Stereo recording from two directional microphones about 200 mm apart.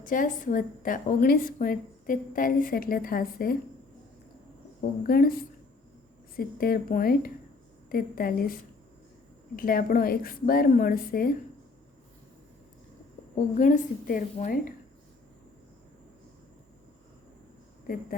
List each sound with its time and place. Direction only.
0.0 s a woman's voice: 40° left (ahead or behind)
5.0 s a woman's voice: 45° left (ahead or behind)
9.6 s a woman's voice: 45° left (ahead or behind)
13.3 s a woman's voice: 40° left (ahead or behind)